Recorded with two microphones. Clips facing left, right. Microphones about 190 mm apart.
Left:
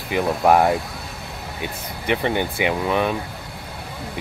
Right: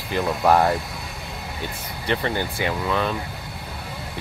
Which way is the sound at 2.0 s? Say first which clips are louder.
Left 3 dB; 15° left (ahead or behind).